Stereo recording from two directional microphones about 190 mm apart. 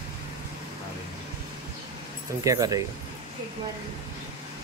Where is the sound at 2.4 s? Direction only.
20° right (ahead or behind).